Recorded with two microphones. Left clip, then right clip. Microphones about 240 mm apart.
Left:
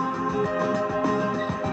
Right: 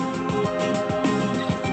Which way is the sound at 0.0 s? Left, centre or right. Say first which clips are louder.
Even; right.